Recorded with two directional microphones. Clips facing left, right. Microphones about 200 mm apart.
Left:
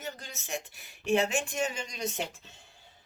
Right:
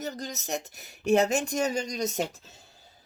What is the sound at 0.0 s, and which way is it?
Speech, 40° right (ahead or behind).